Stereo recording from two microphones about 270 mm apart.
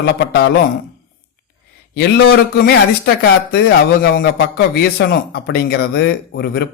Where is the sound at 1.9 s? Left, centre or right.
Left.